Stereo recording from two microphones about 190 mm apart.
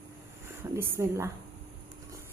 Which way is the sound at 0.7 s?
15° right (ahead or behind).